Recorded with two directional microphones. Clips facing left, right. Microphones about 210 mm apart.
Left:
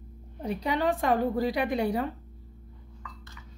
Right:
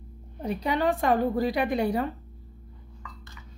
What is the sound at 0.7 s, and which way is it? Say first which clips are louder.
A woman's voice: right 2 dB; 50° right (ahead or behind).